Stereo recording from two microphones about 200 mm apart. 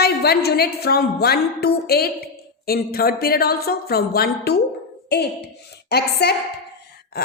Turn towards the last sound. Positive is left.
turn(degrees=55)  # may be behind; listen again after turning